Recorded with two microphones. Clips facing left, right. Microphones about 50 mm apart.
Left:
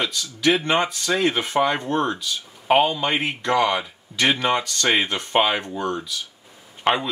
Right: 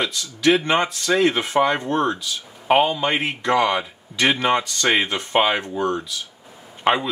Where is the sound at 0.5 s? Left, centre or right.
Centre.